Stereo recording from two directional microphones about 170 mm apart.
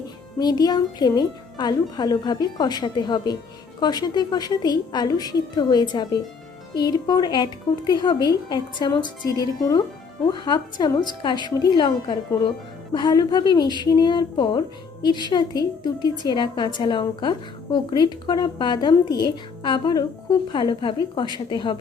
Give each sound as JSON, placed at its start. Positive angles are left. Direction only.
{"t": 0.3, "sound": "a woman's voice", "side_deg": 25}